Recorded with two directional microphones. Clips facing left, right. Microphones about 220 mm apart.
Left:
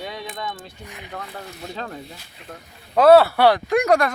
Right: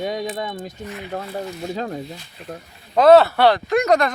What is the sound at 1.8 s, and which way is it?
Speech, 35° right (ahead or behind).